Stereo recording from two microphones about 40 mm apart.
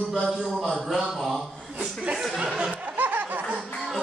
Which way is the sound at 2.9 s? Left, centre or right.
Right.